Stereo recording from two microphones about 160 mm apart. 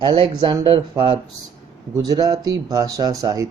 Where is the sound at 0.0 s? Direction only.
30° right (ahead or behind).